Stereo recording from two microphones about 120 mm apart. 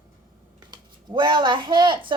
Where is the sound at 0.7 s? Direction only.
40° right (ahead or behind).